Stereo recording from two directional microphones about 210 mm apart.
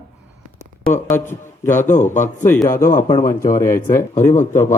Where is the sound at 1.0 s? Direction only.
10° left (ahead or behind).